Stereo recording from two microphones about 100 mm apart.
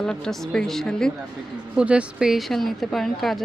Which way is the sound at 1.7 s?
10° right (ahead or behind).